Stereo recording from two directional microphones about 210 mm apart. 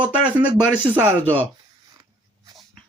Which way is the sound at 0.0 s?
5° right (ahead or behind).